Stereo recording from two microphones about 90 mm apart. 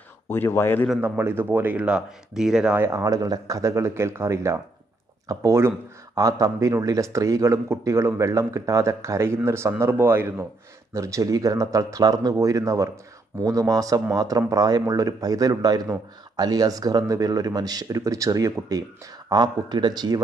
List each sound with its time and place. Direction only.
0.3 s speech: 25° left (ahead or behind)
1.0 s speech: 25° right (ahead or behind); by 2.7 s 5° right (ahead or behind)
2.7 s speech: 30° right (ahead or behind)
19.2 s speech: 50° right (ahead or behind)